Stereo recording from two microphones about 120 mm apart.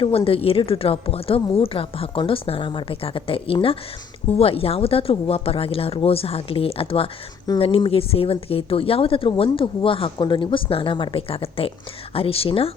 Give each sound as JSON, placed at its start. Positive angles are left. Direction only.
{"t": 0.3, "sound": "speech", "side_deg": 50}